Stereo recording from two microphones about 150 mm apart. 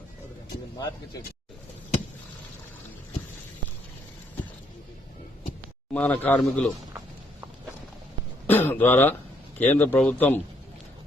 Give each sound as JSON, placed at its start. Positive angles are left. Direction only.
{"t": 5.9, "sound": "speech", "side_deg": 10}
{"t": 8.4, "sound": "speech", "side_deg": 15}